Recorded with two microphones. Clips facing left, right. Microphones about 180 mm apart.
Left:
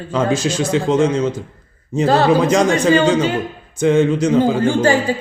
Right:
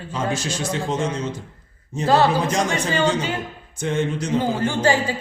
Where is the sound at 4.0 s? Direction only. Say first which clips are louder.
Left 9 dB; 90° left.